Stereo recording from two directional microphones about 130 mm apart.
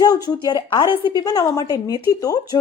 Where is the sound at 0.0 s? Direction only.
30° left (ahead or behind).